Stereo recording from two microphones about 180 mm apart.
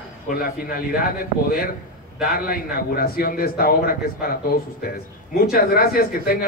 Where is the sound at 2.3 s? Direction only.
55° left (ahead or behind).